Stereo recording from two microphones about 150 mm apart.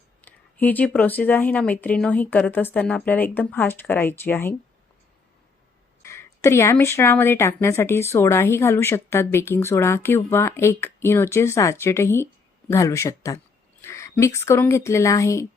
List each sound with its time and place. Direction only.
0.3 s speech: 10° left (ahead or behind)
6.0 s a woman's voice: 20° left (ahead or behind)